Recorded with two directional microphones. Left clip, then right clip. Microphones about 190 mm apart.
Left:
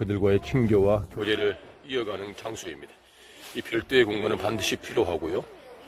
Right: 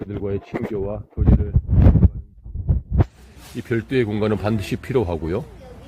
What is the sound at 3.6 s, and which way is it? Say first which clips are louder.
Speech: right 1 dB; 25° left (ahead or behind).